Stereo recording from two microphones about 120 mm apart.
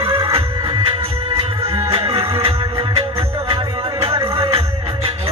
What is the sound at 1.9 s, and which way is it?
Music, 55° right (ahead or behind).